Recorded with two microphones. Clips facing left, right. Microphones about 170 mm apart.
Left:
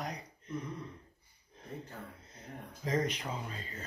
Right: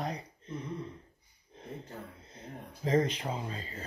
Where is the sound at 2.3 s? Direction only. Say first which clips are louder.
Right 2 dB; 30° right (ahead or behind).